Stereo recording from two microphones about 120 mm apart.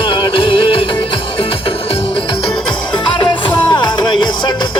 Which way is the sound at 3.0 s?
45° left (ahead or behind).